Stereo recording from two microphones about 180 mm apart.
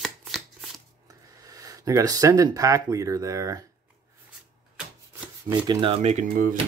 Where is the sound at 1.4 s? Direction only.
20° right (ahead or behind).